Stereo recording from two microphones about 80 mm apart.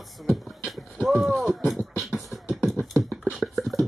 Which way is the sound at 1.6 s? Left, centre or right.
Centre.